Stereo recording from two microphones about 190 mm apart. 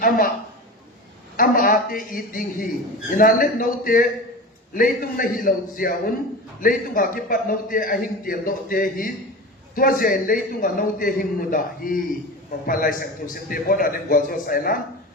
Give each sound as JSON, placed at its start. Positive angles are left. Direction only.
{"t": 0.0, "sound": "a man's voice", "side_deg": 50}
{"t": 1.4, "sound": "a man's voice", "side_deg": 50}